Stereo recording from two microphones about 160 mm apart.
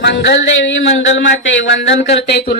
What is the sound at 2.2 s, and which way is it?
Speech, 90° left.